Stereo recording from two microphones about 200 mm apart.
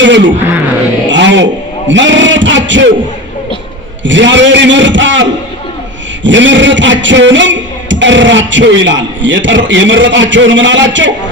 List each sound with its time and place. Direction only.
0.0 s a man's voice: 65° right (ahead or behind)
1.1 s a sound: 65° right (ahead or behind)
1.9 s a man's voice: 65° right (ahead or behind)
4.0 s a man's voice: 65° right (ahead or behind)